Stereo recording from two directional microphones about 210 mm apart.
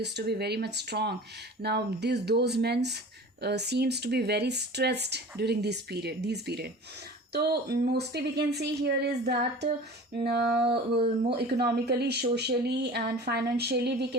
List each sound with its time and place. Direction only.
0.0 s speech: 50° right (ahead or behind)